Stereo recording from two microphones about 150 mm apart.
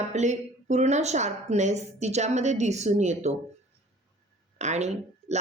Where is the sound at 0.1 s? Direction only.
50° right (ahead or behind).